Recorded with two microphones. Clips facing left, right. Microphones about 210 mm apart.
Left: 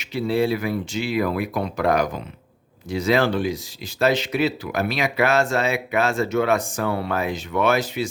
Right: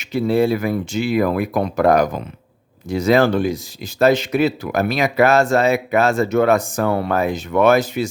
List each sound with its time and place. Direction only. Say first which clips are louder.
0.0 s speech: right 5 dB; 50° right (ahead or behind)